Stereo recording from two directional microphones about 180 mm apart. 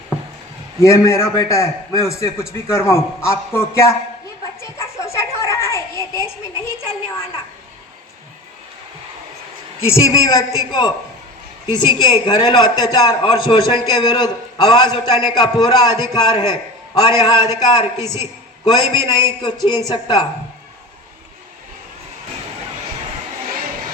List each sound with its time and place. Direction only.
0.8 s a man's voice: 15° left (ahead or behind)
4.6 s a sound: 15° left (ahead or behind)
9.8 s a man's voice: 15° left (ahead or behind)
12.2 s a man's voice: 25° left (ahead or behind)
18.0 s a man's voice: 15° right (ahead or behind)
18.6 s a man's voice: 25° left (ahead or behind)